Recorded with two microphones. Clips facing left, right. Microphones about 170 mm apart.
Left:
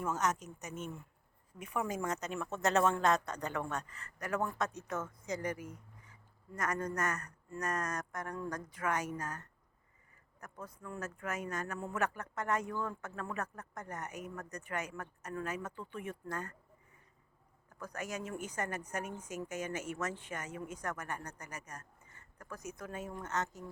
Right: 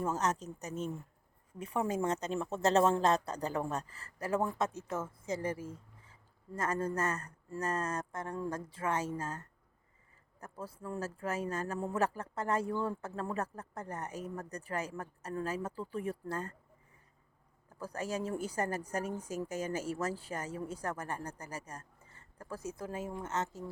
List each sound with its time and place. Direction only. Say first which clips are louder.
0.0 s a woman's voice: right 2 dB; 30° right (ahead or behind)
17.7 s speech: right 4 dB; 30° right (ahead or behind)